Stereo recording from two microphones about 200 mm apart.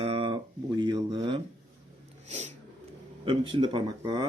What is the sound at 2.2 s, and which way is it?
Cat, 35° right (ahead or behind).